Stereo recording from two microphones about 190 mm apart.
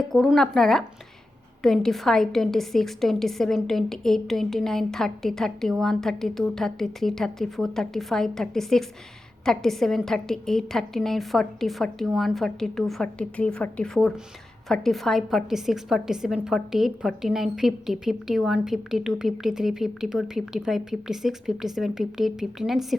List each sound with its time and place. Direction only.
0.1 s a woman's voice: centre (ahead or behind)